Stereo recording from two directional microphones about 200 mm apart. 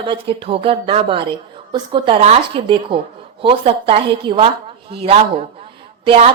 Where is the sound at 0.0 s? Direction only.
25° right (ahead or behind).